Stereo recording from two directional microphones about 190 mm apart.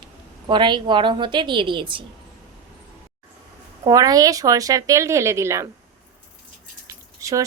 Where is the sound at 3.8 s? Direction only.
20° right (ahead or behind).